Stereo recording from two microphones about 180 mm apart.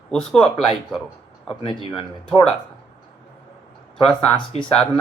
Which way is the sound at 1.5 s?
25° left (ahead or behind).